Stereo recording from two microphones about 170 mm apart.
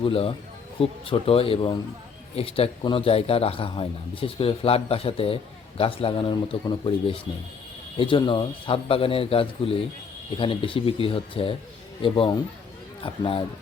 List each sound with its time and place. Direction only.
0.0 s a man's voice: 30° left (ahead or behind)